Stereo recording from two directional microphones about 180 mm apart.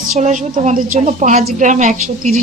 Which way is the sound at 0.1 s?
45° right (ahead or behind).